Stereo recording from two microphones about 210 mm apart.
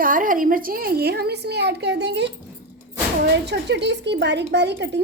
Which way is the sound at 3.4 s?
55° right (ahead or behind).